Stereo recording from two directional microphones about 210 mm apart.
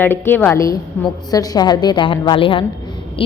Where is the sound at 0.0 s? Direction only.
10° left (ahead or behind).